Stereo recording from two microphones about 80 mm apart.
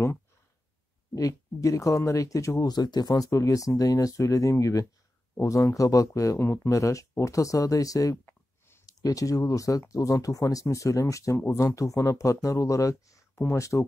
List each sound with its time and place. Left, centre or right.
1.1 s speech: left
2.7 s speech: left
6.4 s speech: left
6.7 s speech: left